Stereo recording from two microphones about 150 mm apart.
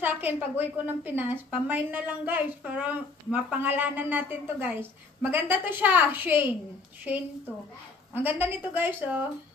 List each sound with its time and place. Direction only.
0.0 s a woman's voice: 15° right (ahead or behind)